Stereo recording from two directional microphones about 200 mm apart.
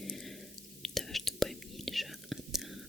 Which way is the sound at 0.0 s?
Centre (ahead or behind).